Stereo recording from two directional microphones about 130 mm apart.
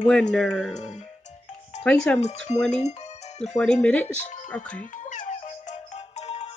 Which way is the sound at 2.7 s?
60° left (ahead or behind).